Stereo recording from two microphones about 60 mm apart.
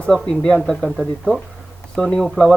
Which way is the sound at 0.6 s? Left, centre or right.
Centre.